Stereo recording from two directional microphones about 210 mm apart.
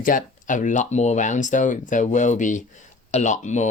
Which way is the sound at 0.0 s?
40° left (ahead or behind).